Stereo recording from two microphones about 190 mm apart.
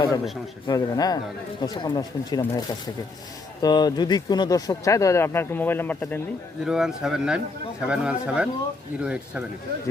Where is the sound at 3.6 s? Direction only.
20° left (ahead or behind).